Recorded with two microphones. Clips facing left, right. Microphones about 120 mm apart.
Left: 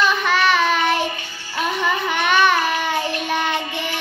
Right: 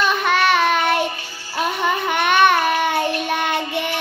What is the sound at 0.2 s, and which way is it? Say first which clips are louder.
Child singing: right 1 dB; 50° right (ahead or behind).